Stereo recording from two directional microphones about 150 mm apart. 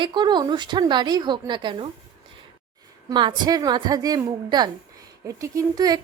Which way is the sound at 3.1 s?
30° right (ahead or behind).